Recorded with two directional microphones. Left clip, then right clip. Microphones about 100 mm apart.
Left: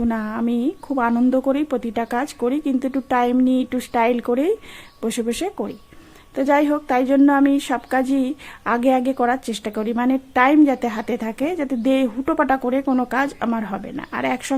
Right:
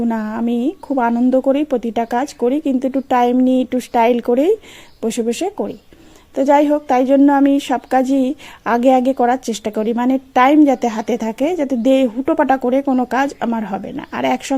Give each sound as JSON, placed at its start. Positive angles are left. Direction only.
{"t": 0.1, "sound": "a woman's voice", "side_deg": -25}
{"t": 1.1, "sound": "a woman's voice", "side_deg": -10}